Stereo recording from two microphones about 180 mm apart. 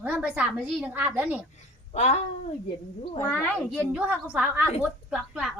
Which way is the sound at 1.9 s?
40° left (ahead or behind).